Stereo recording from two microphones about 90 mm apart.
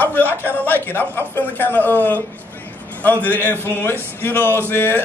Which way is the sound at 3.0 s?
20° left (ahead or behind).